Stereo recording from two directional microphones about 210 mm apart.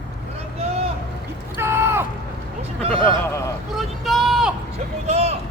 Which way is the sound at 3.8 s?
Centre (ahead or behind).